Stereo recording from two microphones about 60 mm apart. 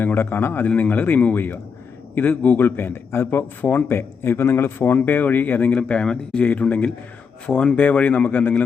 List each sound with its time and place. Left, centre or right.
0.2 s speech: left
0.6 s speech: left